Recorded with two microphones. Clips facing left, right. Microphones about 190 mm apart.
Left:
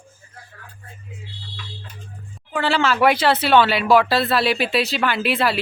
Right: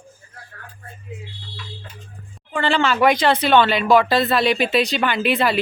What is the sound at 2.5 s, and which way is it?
Speech, 5° left (ahead or behind).